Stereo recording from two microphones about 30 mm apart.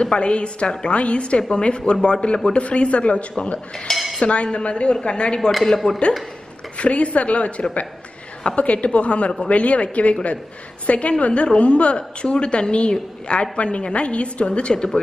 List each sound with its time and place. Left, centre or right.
0.0 s a woman's voice: left
2.6 s a woman's voice: left
3.9 s cutlery: centre
4.2 s a woman's voice: left
5.5 s speech: centre
6.8 s a woman's voice: left